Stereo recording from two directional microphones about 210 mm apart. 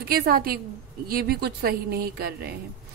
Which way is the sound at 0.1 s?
45° right (ahead or behind).